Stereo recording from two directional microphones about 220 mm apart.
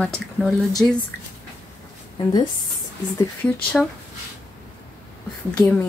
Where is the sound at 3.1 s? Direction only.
5° left (ahead or behind).